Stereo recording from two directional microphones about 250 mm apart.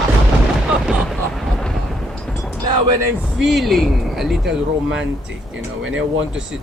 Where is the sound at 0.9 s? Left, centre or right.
Centre.